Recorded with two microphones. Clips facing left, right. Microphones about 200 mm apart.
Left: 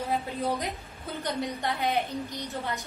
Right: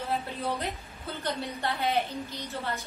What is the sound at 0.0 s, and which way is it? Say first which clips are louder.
A woman's voice: left 2 dB; 15° left (ahead or behind).